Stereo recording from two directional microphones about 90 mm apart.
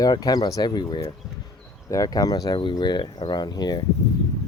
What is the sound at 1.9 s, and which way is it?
Speech, 40° left (ahead or behind).